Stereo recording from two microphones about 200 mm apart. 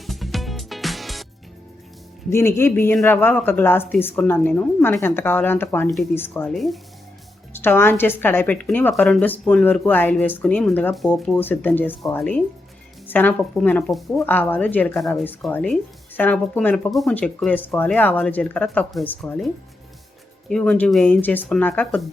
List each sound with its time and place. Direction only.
0.0 s music: centre (ahead or behind)
2.3 s a woman's voice: 15° left (ahead or behind)
7.5 s a woman's voice: 10° left (ahead or behind)
20.5 s speech: 5° left (ahead or behind)